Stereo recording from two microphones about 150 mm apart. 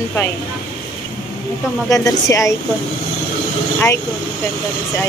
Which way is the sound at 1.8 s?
20° left (ahead or behind).